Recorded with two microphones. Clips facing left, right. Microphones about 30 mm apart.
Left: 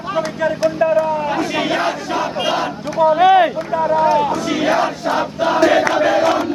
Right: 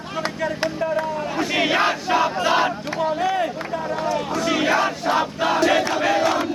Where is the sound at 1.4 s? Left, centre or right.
Centre.